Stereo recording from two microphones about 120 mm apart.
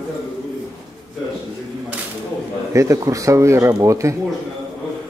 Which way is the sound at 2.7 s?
25° right (ahead or behind).